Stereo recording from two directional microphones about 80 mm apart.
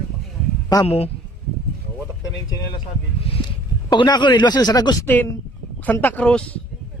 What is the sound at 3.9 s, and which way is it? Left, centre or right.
Speech, left.